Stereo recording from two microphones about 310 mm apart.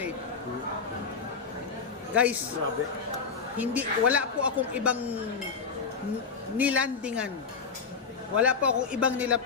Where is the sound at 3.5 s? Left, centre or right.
Centre.